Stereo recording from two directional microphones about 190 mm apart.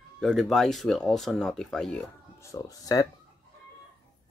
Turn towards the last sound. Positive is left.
turn(degrees=20)  # may be behind; listen again after turning